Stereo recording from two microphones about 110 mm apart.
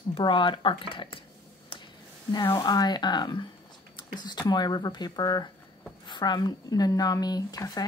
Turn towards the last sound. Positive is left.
turn(degrees=35)  # may be behind; listen again after turning